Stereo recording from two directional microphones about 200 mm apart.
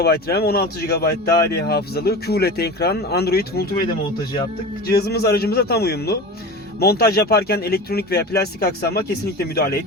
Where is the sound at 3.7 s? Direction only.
20° left (ahead or behind).